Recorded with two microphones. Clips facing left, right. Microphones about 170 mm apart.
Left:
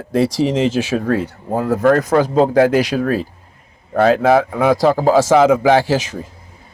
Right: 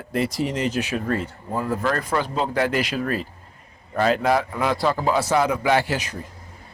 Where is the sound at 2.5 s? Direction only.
85° left.